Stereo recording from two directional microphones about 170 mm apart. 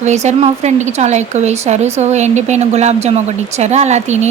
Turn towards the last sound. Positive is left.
turn(degrees=-40)  # may be behind; listen again after turning